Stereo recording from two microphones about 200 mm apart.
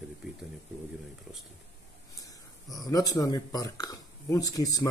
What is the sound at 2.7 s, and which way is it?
Speech, 20° left (ahead or behind).